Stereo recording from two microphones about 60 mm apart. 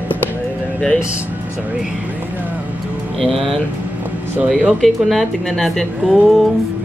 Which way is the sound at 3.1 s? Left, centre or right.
Centre.